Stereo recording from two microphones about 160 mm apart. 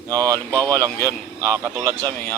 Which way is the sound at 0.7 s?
10° left (ahead or behind).